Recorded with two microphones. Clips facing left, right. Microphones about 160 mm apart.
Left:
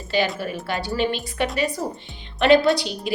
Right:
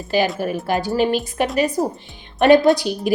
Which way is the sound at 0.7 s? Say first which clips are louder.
Right 5 dB; 45° right (ahead or behind).